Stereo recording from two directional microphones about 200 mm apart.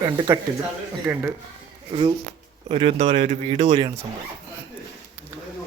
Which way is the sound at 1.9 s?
25° right (ahead or behind).